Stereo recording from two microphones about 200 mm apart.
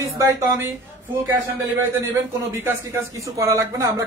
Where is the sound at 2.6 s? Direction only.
15° right (ahead or behind).